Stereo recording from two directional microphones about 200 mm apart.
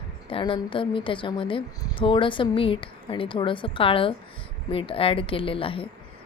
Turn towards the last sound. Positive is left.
turn(degrees=25)  # may be behind; listen again after turning